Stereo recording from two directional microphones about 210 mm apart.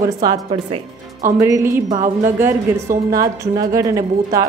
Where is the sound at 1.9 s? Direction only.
35° right (ahead or behind).